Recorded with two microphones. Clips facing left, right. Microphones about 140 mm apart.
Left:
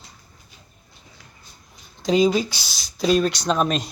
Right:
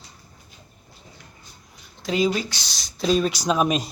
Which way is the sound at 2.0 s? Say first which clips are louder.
Left 4 dB; 20° left (ahead or behind).